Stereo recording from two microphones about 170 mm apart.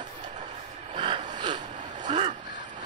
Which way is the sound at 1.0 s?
30° right (ahead or behind).